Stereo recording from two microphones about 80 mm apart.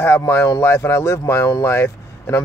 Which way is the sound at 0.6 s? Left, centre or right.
Left.